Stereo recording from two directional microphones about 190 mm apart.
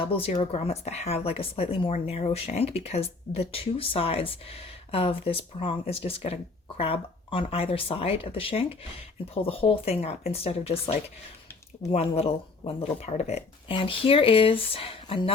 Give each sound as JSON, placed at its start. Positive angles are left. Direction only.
{"t": 0.0, "sound": "speech", "side_deg": 30}